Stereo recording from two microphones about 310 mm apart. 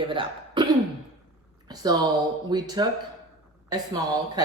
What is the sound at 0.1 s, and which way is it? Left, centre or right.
A woman's voice, centre.